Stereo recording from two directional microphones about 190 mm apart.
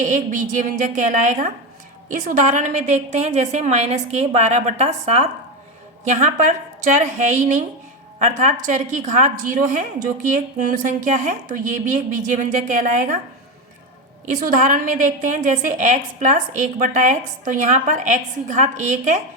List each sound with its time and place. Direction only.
0.0 s a woman's voice: 45° right (ahead or behind)
14.3 s a woman's voice: 45° right (ahead or behind)